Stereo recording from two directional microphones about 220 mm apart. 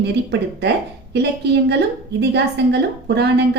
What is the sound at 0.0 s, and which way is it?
A woman's voice, 50° right (ahead or behind).